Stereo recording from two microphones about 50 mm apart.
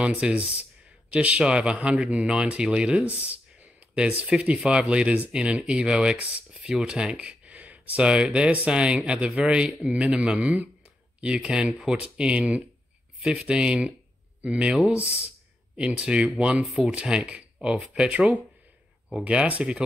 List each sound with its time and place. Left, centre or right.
0.0 s speech: right
3.2 s a sound: right
4.3 s speech: right
6.1 s speech: right
6.5 s speech: centre
18.1 s speech: right